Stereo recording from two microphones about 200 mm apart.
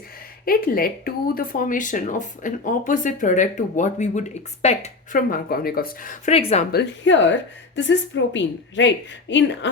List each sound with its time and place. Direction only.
0.4 s speech: 45° left (ahead or behind)
6.3 s speech: 30° left (ahead or behind)
6.7 s a woman's voice: 60° left (ahead or behind)